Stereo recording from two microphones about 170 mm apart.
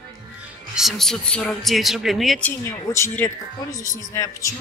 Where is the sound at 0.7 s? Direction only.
Centre (ahead or behind).